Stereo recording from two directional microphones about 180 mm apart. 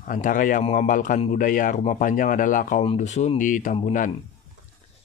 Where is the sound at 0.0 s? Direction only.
50° left (ahead or behind).